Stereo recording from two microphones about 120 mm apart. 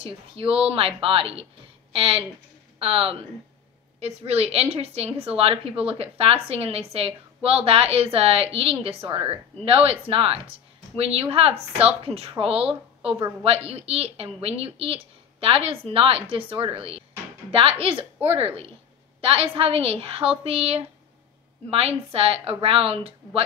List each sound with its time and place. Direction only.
0.0 s a woman's voice: 50° right (ahead or behind)
4.2 s a woman's voice: 60° right (ahead or behind)
19.2 s a woman's voice: 50° right (ahead or behind)